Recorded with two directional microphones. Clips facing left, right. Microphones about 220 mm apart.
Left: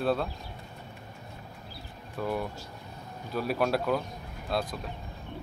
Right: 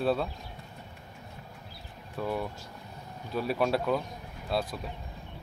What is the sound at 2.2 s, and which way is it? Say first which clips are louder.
Speech: left 1 dB; centre (ahead or behind).